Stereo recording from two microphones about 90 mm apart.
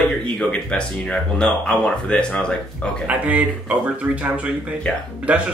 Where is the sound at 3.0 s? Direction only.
15° right (ahead or behind).